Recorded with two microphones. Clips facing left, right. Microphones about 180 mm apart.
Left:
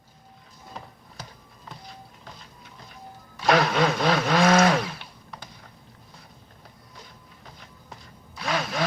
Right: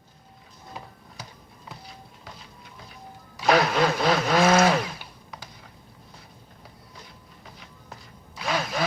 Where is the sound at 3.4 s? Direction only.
Centre (ahead or behind).